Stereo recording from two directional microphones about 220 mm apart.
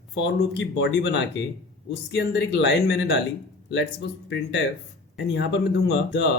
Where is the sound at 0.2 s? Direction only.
50° left (ahead or behind).